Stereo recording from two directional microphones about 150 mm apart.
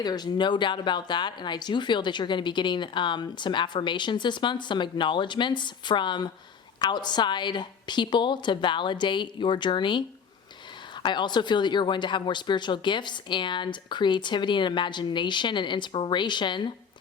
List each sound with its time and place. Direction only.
0.0 s speech: 25° left (ahead or behind)
11.0 s speech: 30° left (ahead or behind)